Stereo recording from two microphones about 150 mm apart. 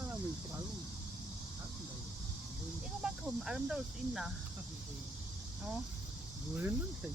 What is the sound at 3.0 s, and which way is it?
Speech, 5° right (ahead or behind).